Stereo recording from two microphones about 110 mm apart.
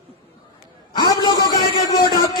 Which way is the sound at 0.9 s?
40° left (ahead or behind).